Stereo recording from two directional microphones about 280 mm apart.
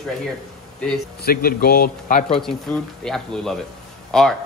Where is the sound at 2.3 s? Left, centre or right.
Centre.